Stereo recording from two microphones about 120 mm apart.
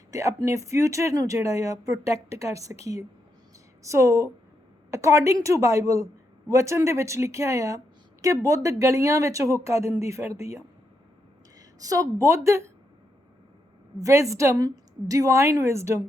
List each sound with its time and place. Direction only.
0.1 s a woman's voice: 25° right (ahead or behind)
11.8 s a woman's voice: 30° right (ahead or behind)
14.0 s a woman's voice: 25° right (ahead or behind)